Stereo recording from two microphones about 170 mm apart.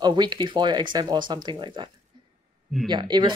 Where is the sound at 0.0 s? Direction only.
25° right (ahead or behind).